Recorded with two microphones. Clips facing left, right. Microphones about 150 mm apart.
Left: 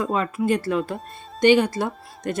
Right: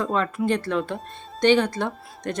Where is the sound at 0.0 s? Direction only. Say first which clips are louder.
Left 1 dB; 5° left (ahead or behind).